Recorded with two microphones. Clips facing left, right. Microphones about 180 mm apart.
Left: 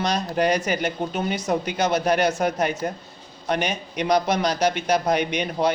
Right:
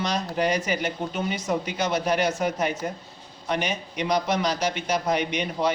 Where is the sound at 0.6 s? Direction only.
65° left (ahead or behind).